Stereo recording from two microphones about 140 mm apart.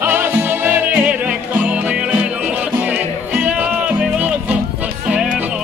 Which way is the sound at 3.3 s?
10° right (ahead or behind).